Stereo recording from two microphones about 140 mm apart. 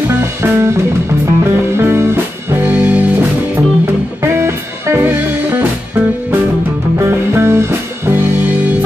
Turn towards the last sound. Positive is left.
turn(degrees=-20)  # may be behind; listen again after turning